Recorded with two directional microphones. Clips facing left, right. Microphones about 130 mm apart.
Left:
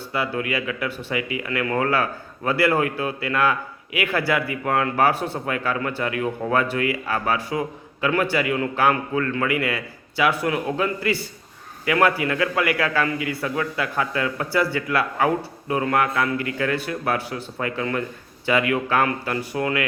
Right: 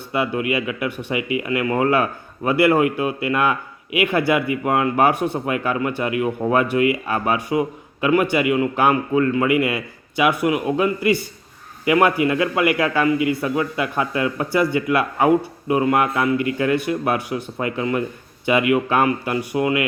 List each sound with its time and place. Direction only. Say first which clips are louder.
0.1 s speech: right 4 dB; 20° right (ahead or behind)